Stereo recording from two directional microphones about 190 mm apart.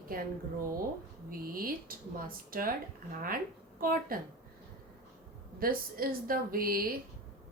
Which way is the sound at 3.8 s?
50° right (ahead or behind).